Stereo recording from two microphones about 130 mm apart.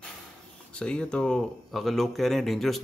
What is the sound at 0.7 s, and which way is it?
Speech, 5° left (ahead or behind).